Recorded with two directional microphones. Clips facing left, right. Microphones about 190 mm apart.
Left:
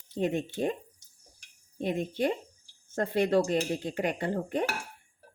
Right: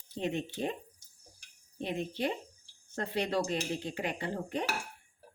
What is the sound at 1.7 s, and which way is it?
Speech, 45° left (ahead or behind).